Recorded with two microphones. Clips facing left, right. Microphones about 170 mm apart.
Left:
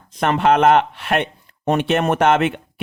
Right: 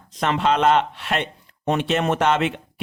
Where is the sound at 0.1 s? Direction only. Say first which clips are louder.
Left 4 dB; 55° left (ahead or behind).